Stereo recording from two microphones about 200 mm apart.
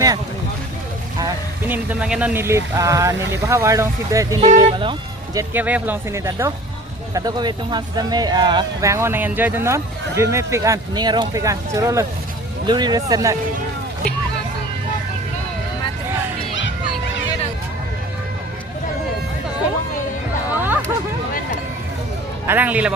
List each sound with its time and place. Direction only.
1.2 s speech: 10° right (ahead or behind)
20.5 s hubbub: 10° right (ahead or behind)
22.4 s speech: 10° right (ahead or behind)